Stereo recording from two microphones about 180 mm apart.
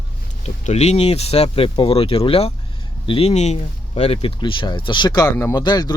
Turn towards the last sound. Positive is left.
turn(degrees=25)  # may be behind; listen again after turning